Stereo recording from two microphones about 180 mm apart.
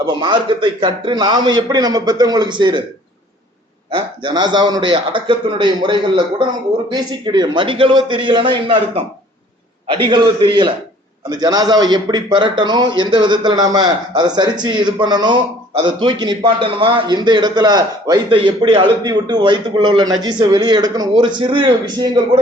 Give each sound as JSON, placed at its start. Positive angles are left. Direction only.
{"t": 0.0, "sound": "a man's voice", "side_deg": -25}
{"t": 3.9, "sound": "a man's voice", "side_deg": -25}
{"t": 9.9, "sound": "a man's voice", "side_deg": -25}